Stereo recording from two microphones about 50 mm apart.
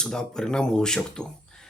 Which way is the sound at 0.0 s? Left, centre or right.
Centre.